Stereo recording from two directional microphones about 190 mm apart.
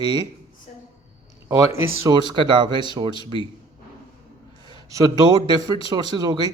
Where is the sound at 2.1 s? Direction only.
20° right (ahead or behind).